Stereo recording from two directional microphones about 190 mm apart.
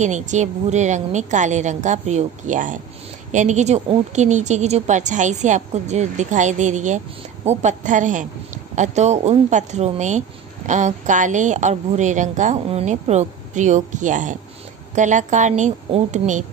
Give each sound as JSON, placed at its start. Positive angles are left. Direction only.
{"t": 0.0, "sound": "a woman's voice", "side_deg": -40}